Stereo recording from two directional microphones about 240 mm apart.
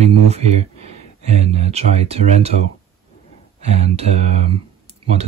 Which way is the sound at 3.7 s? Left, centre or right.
Right.